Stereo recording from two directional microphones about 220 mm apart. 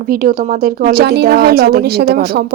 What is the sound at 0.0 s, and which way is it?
A woman's voice, 40° right (ahead or behind).